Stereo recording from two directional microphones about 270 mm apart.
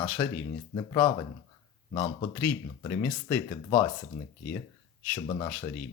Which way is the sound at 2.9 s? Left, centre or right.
Centre.